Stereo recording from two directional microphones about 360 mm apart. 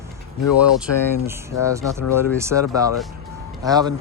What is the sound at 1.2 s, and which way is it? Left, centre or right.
Speech, centre.